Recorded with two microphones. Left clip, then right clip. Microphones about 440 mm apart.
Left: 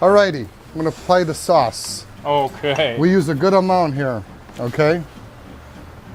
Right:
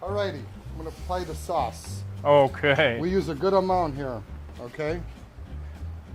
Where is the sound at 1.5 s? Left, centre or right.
Left.